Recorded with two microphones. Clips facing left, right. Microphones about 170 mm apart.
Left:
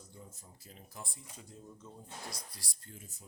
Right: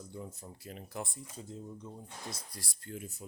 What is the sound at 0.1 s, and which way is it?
Speech, 65° right (ahead or behind).